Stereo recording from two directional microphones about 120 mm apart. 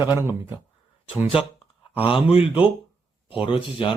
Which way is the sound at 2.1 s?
50° left (ahead or behind).